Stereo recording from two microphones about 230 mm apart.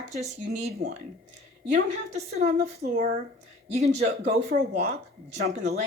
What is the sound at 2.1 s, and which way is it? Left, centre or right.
Speech, right.